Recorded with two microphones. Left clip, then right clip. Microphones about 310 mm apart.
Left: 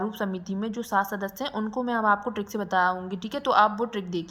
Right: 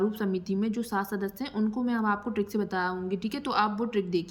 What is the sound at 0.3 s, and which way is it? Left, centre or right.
Speech, right.